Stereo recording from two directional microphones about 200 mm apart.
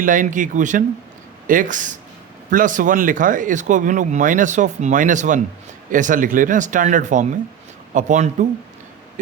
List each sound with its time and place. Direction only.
0.0 s speech: 40° right (ahead or behind)